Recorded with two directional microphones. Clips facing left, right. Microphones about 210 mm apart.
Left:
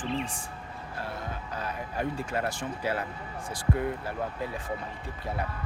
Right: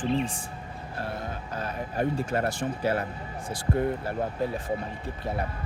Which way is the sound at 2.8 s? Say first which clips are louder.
Right 3 dB; 30° right (ahead or behind).